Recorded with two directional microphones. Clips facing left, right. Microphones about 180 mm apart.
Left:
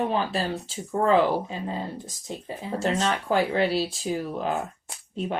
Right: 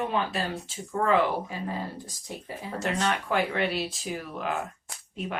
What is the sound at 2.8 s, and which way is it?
Speech, 25° left (ahead or behind).